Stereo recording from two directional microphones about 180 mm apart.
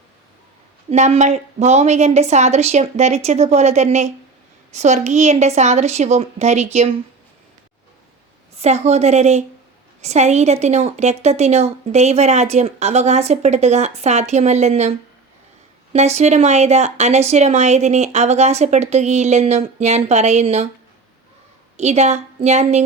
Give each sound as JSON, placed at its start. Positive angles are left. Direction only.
{"t": 0.9, "sound": "a woman's voice", "side_deg": -40}
{"t": 8.5, "sound": "a woman's voice", "side_deg": -35}
{"t": 21.8, "sound": "a woman's voice", "side_deg": -40}